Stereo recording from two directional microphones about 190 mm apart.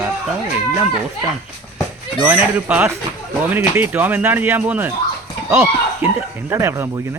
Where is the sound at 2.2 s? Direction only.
10° right (ahead or behind).